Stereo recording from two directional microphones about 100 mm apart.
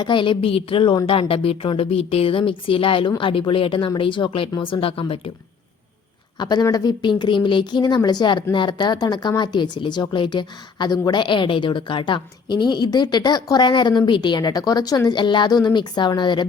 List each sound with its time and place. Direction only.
0.0 s speech: 55° left (ahead or behind)
6.4 s speech: 45° left (ahead or behind)